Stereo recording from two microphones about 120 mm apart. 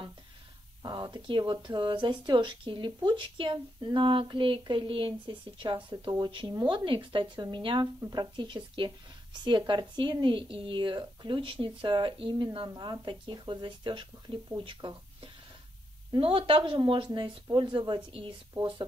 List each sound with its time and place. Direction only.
0.8 s speech: 40° right (ahead or behind)
16.1 s speech: 45° right (ahead or behind)